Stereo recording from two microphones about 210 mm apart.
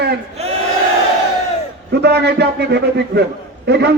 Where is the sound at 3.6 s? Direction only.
55° right (ahead or behind).